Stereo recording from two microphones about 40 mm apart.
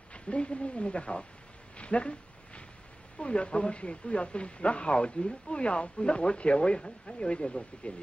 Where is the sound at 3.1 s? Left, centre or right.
Left.